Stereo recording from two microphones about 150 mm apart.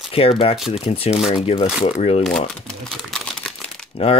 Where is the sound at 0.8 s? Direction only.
40° left (ahead or behind).